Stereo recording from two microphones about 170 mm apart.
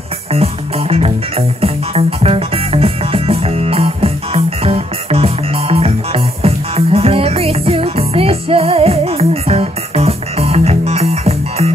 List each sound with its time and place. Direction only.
0.3 s music: 35° right (ahead or behind)